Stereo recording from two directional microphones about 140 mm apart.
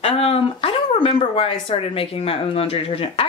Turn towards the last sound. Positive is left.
turn(degrees=45)  # may be behind; listen again after turning